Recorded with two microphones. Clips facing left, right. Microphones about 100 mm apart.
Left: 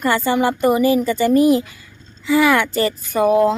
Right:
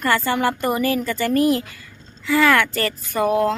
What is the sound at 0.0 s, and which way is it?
A woman's voice, 15° left (ahead or behind).